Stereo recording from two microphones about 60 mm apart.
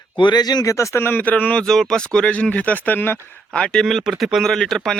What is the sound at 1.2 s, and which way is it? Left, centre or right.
Speech, left.